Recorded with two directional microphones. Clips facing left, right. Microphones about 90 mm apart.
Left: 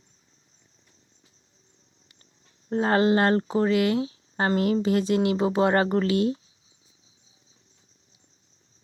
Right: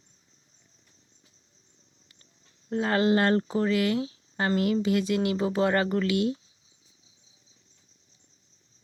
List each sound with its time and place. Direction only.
2.6 s speech: 35° left (ahead or behind)